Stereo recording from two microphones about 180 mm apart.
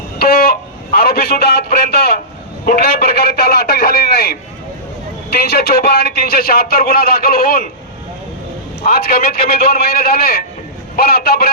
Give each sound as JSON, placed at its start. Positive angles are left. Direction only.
{"t": 0.2, "sound": "a sound", "side_deg": 55}
{"t": 0.9, "sound": "a man's voice", "side_deg": 55}
{"t": 8.8, "sound": "a man's voice", "side_deg": 55}